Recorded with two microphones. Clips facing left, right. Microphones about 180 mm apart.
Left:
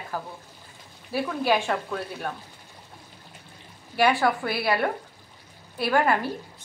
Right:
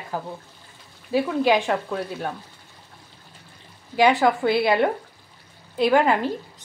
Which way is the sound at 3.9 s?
20° right (ahead or behind).